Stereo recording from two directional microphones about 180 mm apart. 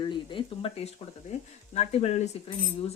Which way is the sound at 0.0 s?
30° left (ahead or behind).